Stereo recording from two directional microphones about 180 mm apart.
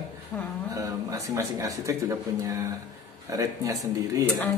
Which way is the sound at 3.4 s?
20° right (ahead or behind).